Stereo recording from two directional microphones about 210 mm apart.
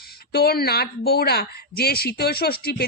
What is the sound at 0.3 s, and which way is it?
Speech, 50° left (ahead or behind).